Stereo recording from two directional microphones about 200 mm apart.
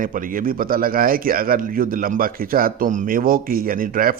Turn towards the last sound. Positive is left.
turn(degrees=-45)  # may be behind; listen again after turning